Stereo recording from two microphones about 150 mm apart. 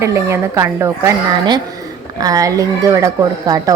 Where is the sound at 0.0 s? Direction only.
20° right (ahead or behind).